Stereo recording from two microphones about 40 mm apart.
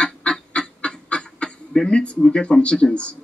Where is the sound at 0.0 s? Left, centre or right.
Left.